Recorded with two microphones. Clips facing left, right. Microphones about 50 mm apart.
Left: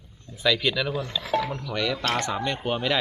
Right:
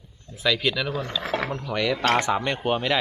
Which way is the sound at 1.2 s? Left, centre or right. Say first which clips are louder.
Left 3 dB; right.